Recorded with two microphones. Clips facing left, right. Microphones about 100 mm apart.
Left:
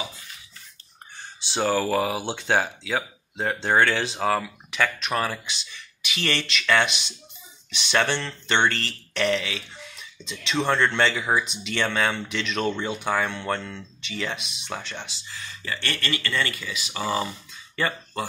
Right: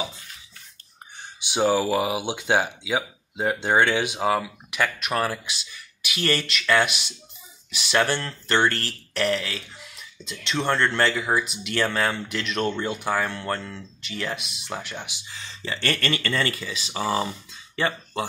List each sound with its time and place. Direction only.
1.5 s speech: 10° right (ahead or behind)
15.8 s speech: 40° right (ahead or behind); by 17.3 s 25° right (ahead or behind)
17.7 s a sound: 20° right (ahead or behind)